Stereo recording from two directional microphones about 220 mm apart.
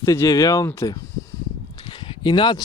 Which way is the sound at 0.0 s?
15° left (ahead or behind).